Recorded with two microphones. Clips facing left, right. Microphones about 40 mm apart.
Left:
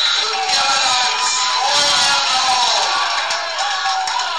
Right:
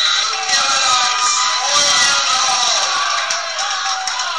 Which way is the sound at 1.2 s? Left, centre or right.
Right.